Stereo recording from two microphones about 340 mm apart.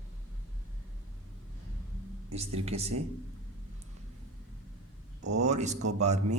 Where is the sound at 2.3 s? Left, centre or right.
Centre.